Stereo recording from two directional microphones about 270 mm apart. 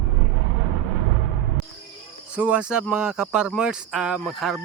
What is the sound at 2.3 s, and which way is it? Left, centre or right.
Speech, centre.